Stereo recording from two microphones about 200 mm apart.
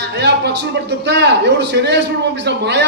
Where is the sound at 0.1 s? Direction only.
60° right (ahead or behind).